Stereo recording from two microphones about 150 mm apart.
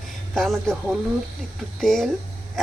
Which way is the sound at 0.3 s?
5° left (ahead or behind).